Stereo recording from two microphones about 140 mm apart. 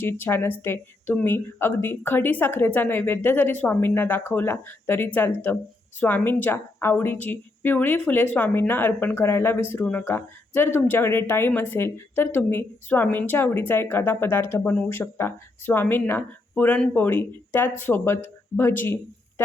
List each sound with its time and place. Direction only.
0.0 s speech: 15° left (ahead or behind)